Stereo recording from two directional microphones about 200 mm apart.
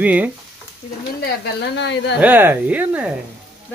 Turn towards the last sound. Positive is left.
turn(degrees=-5)  # may be behind; listen again after turning